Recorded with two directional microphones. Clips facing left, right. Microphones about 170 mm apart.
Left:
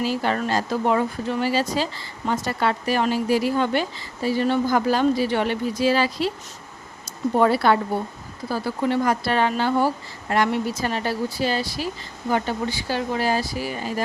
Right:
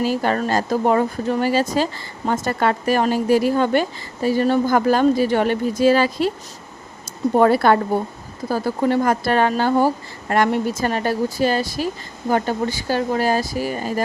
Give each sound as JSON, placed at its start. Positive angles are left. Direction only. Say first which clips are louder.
{"t": 0.0, "sound": "speech", "louder": "right 3 dB", "side_deg": -45}
{"t": 7.3, "sound": "speech", "louder": "right 4 dB", "side_deg": -50}